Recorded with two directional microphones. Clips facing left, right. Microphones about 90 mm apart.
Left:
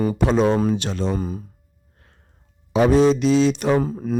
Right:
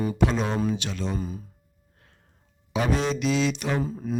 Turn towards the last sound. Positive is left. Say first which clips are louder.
# left 5 dB
turn(degrees=55)  # may be behind; listen again after turning